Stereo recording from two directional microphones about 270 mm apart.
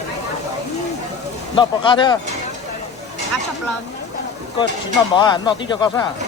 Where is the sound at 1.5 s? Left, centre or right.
Centre.